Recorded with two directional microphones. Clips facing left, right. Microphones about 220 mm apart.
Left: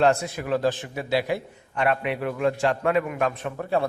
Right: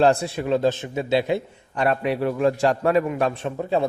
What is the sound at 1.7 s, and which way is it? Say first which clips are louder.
A man's voice: right 2 dB; 35° right (ahead or behind).